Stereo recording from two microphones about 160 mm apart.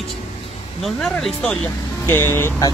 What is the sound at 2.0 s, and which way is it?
Speech, 15° left (ahead or behind).